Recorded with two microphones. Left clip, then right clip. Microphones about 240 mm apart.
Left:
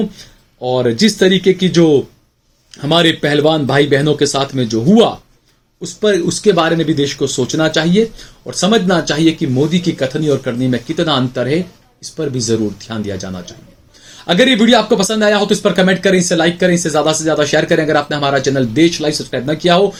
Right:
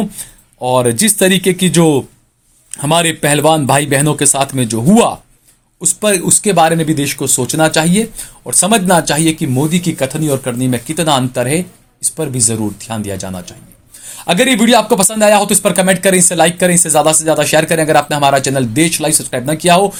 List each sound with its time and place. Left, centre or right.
0.2 s speech: right